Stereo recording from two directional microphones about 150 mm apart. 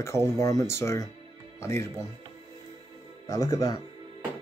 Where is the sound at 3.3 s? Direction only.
25° left (ahead or behind).